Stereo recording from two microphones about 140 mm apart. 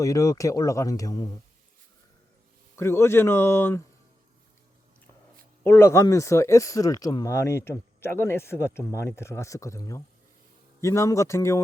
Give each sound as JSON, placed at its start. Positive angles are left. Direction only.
{"t": 0.0, "sound": "speech", "side_deg": 25}
{"t": 2.7, "sound": "speech", "side_deg": 20}
{"t": 5.6, "sound": "speech", "side_deg": 15}